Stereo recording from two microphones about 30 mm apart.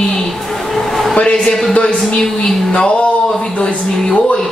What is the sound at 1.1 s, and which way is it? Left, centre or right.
A woman's voice, left.